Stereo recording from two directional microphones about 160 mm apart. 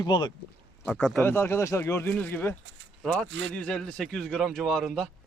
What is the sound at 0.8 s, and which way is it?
Speech, 5° left (ahead or behind).